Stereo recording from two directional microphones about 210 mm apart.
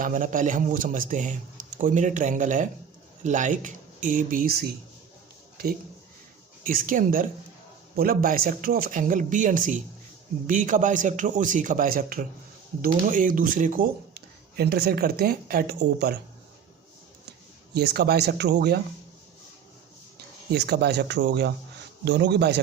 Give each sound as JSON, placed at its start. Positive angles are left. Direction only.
{"t": 0.0, "sound": "a man's voice", "side_deg": -40}
{"t": 6.7, "sound": "a man's voice", "side_deg": -40}
{"t": 17.7, "sound": "speech", "side_deg": -50}
{"t": 20.5, "sound": "speech", "side_deg": -50}